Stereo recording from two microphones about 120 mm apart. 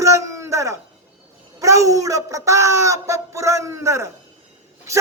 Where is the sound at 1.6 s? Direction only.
25° right (ahead or behind).